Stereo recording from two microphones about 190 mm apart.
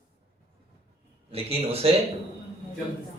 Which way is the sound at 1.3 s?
30° right (ahead or behind).